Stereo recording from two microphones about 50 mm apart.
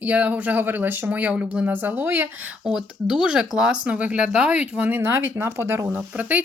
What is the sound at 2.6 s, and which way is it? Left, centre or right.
Speech, centre.